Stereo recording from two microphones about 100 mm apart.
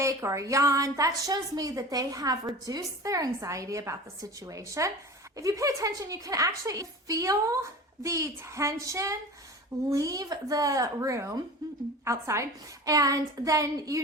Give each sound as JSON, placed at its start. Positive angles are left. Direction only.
{"t": 0.0, "sound": "a woman's voice", "side_deg": -30}